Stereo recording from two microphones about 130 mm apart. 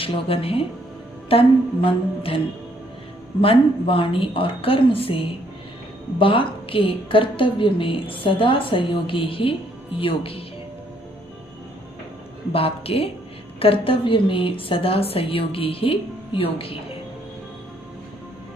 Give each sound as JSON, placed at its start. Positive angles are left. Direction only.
{"t": 0.0, "sound": "a woman's voice", "side_deg": 45}
{"t": 3.4, "sound": "a woman's voice", "side_deg": 45}
{"t": 12.5, "sound": "a woman's voice", "side_deg": 45}